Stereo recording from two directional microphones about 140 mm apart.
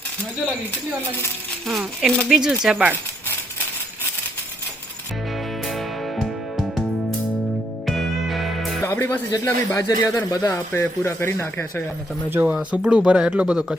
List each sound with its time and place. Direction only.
0.7 s speech: 15° left (ahead or behind)
1.6 s speech: centre (ahead or behind)
5.6 s music: centre (ahead or behind)
7.9 s music: centre (ahead or behind)
8.8 s speech: 15° left (ahead or behind)
9.3 s speech: 25° left (ahead or behind)
12.3 s speech: 15° right (ahead or behind)